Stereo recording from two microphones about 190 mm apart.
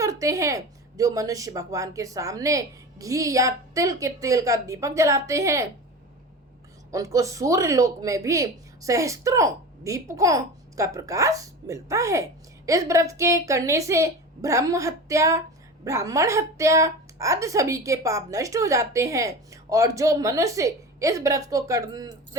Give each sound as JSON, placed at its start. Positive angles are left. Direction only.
{"t": 0.0, "sound": "speech", "side_deg": -15}
{"t": 6.9, "sound": "speech", "side_deg": -15}